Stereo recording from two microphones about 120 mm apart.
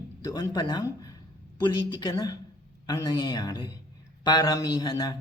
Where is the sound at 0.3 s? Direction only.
25° left (ahead or behind).